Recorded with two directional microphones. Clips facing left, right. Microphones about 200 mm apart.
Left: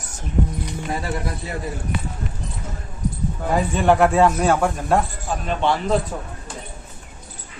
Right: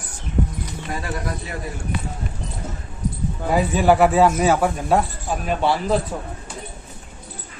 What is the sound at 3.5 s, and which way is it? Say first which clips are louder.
Speech: right 1 dB; 5° right (ahead or behind).